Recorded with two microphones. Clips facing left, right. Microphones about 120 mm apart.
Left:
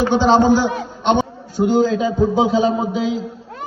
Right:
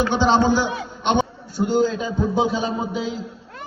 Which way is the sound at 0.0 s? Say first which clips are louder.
Left 4 dB; 40° left (ahead or behind).